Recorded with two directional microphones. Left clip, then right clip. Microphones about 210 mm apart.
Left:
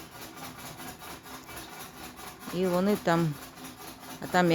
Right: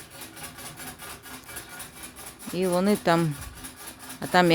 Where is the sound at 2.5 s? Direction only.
20° right (ahead or behind).